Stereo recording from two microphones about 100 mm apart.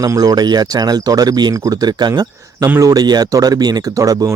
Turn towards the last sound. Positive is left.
turn(degrees=-35)  # may be behind; listen again after turning